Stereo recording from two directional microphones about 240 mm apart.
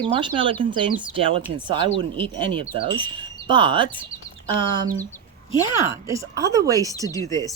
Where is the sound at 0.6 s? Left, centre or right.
Centre.